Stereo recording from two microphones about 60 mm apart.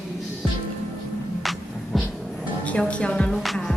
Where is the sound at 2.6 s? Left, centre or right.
Centre.